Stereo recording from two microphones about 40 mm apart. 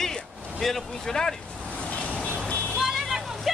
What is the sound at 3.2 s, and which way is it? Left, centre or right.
Vehicle, centre.